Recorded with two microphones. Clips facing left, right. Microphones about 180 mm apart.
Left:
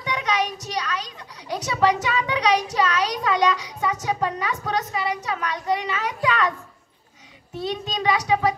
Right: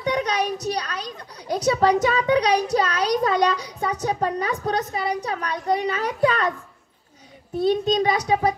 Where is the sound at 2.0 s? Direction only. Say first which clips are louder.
Right 4 dB; 40° right (ahead or behind).